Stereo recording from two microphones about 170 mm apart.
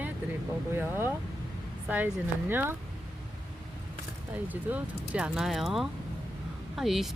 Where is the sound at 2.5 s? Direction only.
10° right (ahead or behind).